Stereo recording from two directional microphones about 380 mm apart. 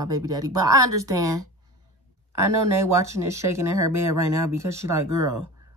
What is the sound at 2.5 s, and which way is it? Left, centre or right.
Speech, right.